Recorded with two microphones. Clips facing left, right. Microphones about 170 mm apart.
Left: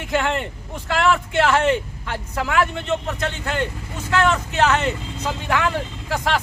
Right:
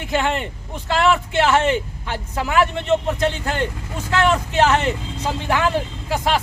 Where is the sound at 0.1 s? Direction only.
20° right (ahead or behind).